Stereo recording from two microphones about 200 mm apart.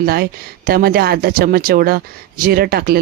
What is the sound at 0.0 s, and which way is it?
Speech, 50° right (ahead or behind).